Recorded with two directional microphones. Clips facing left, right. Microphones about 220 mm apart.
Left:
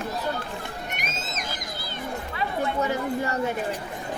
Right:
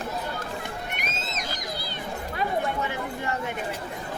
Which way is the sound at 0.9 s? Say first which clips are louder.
Even; 45° left (ahead or behind).